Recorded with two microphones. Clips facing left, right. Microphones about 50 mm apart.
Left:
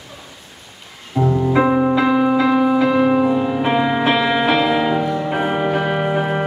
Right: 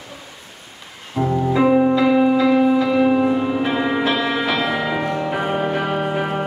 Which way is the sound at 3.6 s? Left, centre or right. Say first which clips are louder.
Left 3 dB; centre.